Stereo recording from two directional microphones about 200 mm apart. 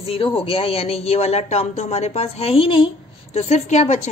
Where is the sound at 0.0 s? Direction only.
30° left (ahead or behind).